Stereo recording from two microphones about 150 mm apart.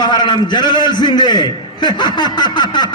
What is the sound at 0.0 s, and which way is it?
A man's voice, 30° left (ahead or behind).